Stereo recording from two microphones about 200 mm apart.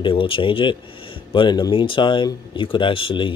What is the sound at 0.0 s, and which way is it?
Speech, 25° left (ahead or behind).